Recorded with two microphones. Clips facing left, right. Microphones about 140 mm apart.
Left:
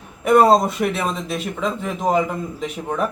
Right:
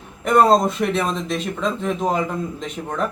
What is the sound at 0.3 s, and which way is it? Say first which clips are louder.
Speech: left 1 dB; 5° left (ahead or behind).